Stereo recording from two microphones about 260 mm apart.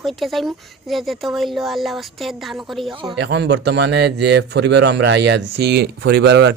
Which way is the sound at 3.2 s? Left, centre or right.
Right.